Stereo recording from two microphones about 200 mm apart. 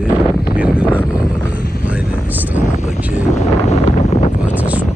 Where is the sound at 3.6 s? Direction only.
35° left (ahead or behind).